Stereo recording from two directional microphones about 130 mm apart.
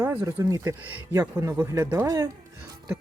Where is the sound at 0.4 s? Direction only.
25° right (ahead or behind).